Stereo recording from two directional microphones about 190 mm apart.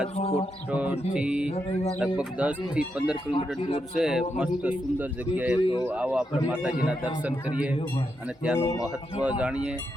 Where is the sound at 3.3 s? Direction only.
30° left (ahead or behind).